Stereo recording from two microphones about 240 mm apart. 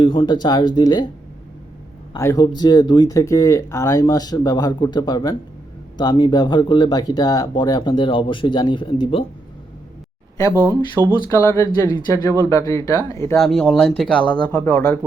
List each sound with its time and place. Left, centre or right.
0.0 s speech: left
2.1 s speech: centre
10.5 s speech: centre
11.2 s speech: centre
13.4 s speech: centre